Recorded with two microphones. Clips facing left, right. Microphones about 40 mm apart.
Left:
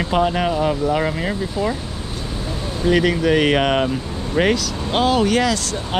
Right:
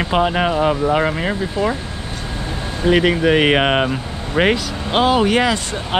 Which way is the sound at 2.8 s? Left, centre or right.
Right.